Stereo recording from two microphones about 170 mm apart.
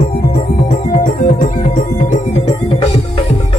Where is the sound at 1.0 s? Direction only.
50° left (ahead or behind).